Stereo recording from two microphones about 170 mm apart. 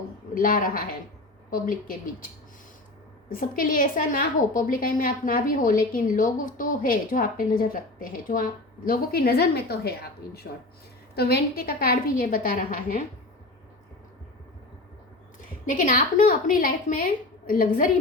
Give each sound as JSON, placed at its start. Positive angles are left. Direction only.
{"t": 0.3, "sound": "a woman's voice", "side_deg": 55}
{"t": 3.2, "sound": "a woman's voice", "side_deg": 55}
{"t": 15.7, "sound": "a woman's voice", "side_deg": 50}